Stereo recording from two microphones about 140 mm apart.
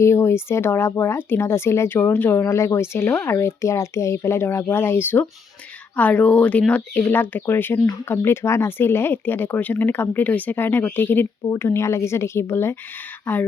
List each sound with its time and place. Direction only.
0.0 s speech: 20° left (ahead or behind)